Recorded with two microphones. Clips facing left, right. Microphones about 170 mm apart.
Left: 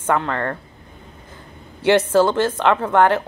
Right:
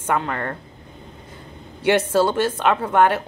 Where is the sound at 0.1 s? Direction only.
20° right (ahead or behind).